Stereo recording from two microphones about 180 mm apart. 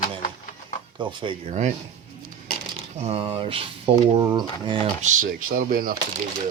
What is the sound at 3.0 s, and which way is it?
Speech, 30° right (ahead or behind).